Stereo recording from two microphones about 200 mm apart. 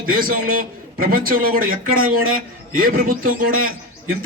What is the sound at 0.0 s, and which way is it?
A man's voice, 45° right (ahead or behind).